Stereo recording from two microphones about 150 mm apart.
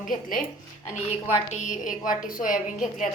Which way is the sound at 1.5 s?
55° left (ahead or behind).